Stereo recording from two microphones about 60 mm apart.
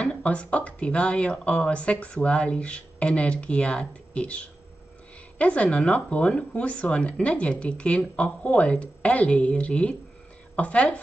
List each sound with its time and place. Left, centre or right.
0.0 s speech: centre
5.4 s speech: left